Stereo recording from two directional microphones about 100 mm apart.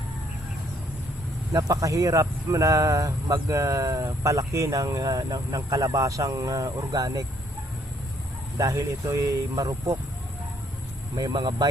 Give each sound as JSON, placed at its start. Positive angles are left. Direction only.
{"t": 1.5, "sound": "speech", "side_deg": -35}
{"t": 8.5, "sound": "speech", "side_deg": -35}
{"t": 11.1, "sound": "speech", "side_deg": -40}